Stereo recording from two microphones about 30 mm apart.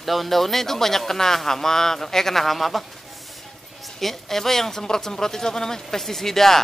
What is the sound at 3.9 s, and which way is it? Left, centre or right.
A woman's voice, centre.